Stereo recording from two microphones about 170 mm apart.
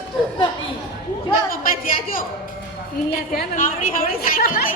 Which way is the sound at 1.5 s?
55° left (ahead or behind).